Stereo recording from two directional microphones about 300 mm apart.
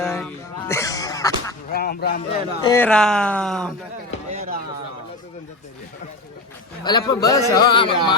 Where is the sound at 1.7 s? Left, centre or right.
Left.